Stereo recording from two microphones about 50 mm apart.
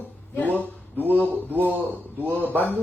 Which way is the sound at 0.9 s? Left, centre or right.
Right.